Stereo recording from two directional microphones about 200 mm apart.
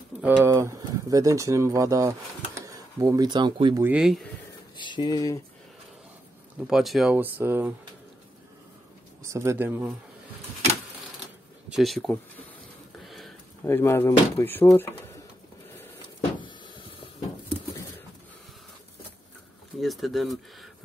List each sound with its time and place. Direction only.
0.2 s speech: 15° right (ahead or behind)
3.8 s speech: 5° right (ahead or behind)
4.7 s speech: 20° left (ahead or behind)
6.7 s speech: centre (ahead or behind)
9.3 s speech: 15° right (ahead or behind)
11.7 s speech: centre (ahead or behind)
13.0 s a sound: centre (ahead or behind)
13.7 s speech: 10° left (ahead or behind)
16.3 s a sound: 25° left (ahead or behind)
19.8 s speech: centre (ahead or behind)